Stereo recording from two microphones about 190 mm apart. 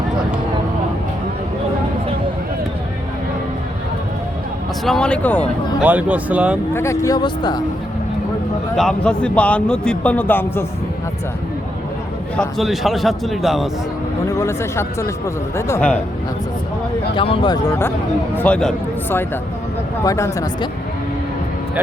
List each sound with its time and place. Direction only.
4.9 s a man's voice: 5° left (ahead or behind)
5.8 s speech: 10° right (ahead or behind)
6.7 s a man's voice: 15° left (ahead or behind)
8.7 s a man's voice: 5° left (ahead or behind)
12.4 s a man's voice: centre (ahead or behind)
14.3 s a man's voice: 15° left (ahead or behind)
17.2 s a man's voice: 25° left (ahead or behind); by 18.7 s 5° left (ahead or behind)
20.1 s a man's voice: 15° left (ahead or behind)